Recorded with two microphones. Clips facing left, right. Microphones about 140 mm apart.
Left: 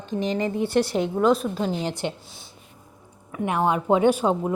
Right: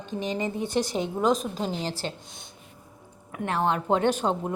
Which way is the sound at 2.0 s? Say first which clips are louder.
Left 5 dB; 15° left (ahead or behind).